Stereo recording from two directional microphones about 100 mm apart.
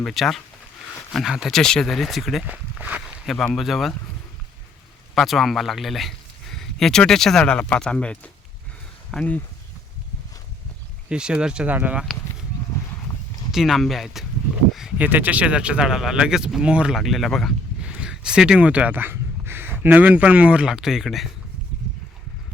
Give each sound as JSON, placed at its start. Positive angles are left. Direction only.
{"t": 0.0, "sound": "speech", "side_deg": 0}
{"t": 2.5, "sound": "walk", "side_deg": -15}
{"t": 3.2, "sound": "speech", "side_deg": 5}
{"t": 5.1, "sound": "speech", "side_deg": 0}
{"t": 11.1, "sound": "speech", "side_deg": -10}
{"t": 13.5, "sound": "speech", "side_deg": -5}
{"t": 14.7, "sound": "a sound", "side_deg": -5}
{"t": 14.9, "sound": "speech", "side_deg": -15}
{"t": 17.8, "sound": "a sound", "side_deg": -10}
{"t": 19.8, "sound": "speech", "side_deg": -20}